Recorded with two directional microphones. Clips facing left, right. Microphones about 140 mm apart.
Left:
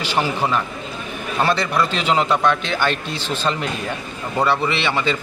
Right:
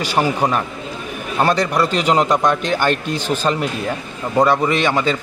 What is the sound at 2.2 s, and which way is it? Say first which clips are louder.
Speech: right 2 dB; 15° right (ahead or behind).